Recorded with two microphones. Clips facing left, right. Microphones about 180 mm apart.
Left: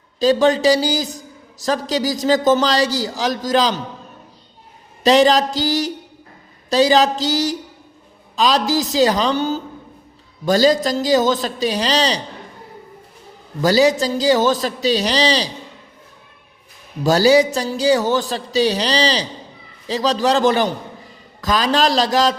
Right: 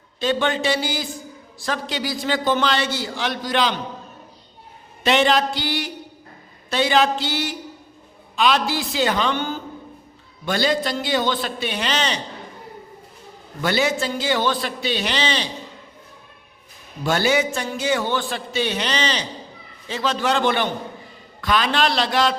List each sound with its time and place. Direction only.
0.2 s a man's voice: 40° left (ahead or behind)
5.0 s a man's voice: 35° left (ahead or behind)
13.6 s a man's voice: 35° left (ahead or behind)
17.0 s a man's voice: 35° left (ahead or behind)